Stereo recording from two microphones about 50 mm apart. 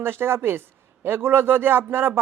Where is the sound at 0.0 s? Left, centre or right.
Right.